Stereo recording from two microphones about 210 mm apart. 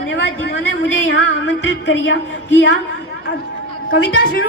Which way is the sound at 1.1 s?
65° left (ahead or behind).